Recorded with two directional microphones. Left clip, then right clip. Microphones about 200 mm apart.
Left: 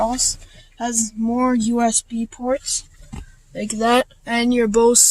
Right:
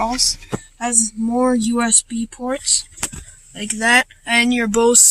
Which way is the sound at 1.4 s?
10° right (ahead or behind).